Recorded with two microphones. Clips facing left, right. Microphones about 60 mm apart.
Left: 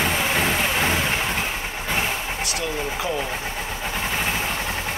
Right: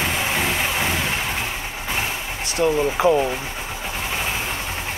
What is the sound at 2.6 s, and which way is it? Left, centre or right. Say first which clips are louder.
Speech: right 12 dB; right.